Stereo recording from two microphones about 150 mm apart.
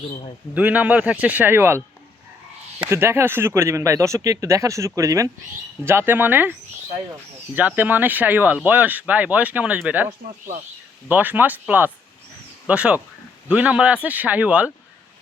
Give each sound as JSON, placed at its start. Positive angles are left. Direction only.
{"t": 0.5, "sound": "speech", "side_deg": -10}
{"t": 2.9, "sound": "speech", "side_deg": -15}
{"t": 11.1, "sound": "speech", "side_deg": -10}